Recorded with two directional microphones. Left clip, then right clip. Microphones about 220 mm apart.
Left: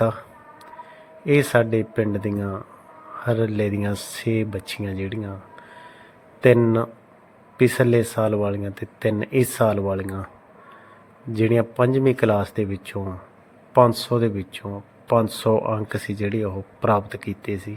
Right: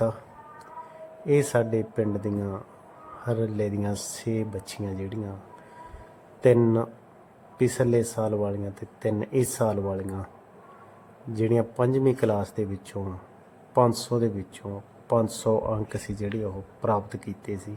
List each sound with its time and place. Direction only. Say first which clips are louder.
1.2 s speech: left 5 dB; 10° left (ahead or behind)
6.4 s speech: left 4 dB; 10° left (ahead or behind)
11.3 s speech: left 5 dB; 10° left (ahead or behind)